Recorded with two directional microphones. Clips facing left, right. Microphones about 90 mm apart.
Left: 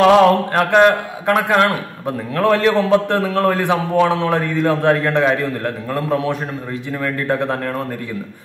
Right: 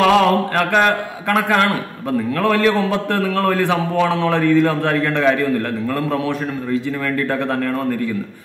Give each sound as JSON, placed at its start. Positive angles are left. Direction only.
{"t": 0.0, "sound": "a man's voice", "side_deg": 25}